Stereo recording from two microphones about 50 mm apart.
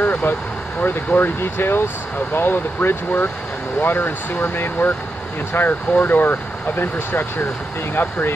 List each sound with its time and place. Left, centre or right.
0.0 s speech: left